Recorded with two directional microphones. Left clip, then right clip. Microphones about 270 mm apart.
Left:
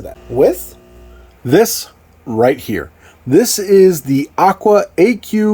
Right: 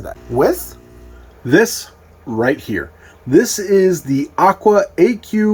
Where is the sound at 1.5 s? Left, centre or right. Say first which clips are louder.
Left 2 dB; left.